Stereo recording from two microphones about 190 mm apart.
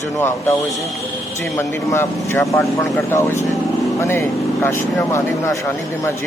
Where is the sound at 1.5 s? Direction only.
15° left (ahead or behind).